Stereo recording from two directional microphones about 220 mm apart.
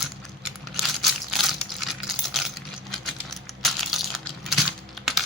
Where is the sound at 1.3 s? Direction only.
Centre (ahead or behind).